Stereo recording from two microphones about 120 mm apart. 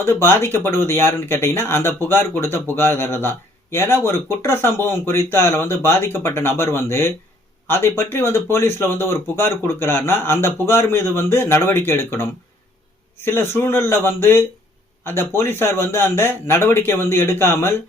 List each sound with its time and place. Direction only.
0.0 s speech: 20° left (ahead or behind)